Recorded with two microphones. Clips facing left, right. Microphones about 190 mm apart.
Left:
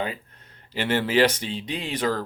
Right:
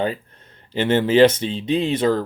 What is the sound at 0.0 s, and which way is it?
Speech, 30° right (ahead or behind).